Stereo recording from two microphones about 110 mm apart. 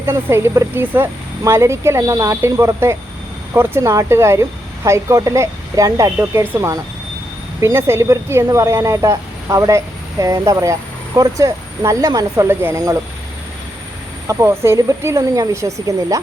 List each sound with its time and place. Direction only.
0.0 s speech: 25° right (ahead or behind)
14.3 s speech: 25° right (ahead or behind)